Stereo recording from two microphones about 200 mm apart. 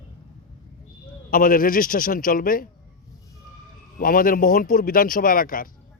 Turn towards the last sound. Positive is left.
turn(degrees=45)  # may be behind; listen again after turning